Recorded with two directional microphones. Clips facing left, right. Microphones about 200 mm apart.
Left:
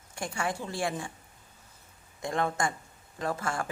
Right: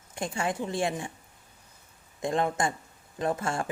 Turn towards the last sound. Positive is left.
turn(degrees=-25)  # may be behind; listen again after turning